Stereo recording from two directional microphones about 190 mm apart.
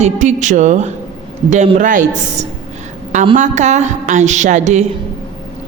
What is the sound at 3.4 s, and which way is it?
A woman's voice, 40° right (ahead or behind).